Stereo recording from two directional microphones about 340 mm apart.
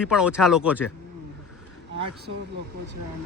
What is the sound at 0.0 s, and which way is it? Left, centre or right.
Speech, centre.